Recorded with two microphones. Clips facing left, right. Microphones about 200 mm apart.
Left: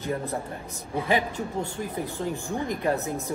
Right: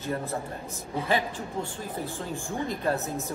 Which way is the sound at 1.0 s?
15° left (ahead or behind).